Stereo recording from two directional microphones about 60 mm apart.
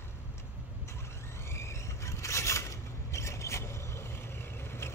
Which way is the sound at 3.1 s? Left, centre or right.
Left.